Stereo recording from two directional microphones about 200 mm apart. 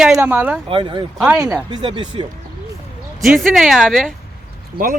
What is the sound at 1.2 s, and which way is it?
Speech, 5° right (ahead or behind).